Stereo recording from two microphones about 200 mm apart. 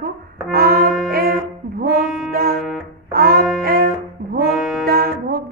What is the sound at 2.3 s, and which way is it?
Music, 50° right (ahead or behind).